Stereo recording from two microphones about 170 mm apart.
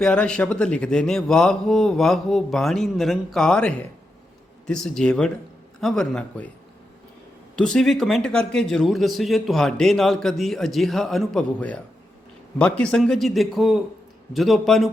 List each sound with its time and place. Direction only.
0.0 s a man's voice: 5° left (ahead or behind)
7.5 s a man's voice: 5° left (ahead or behind)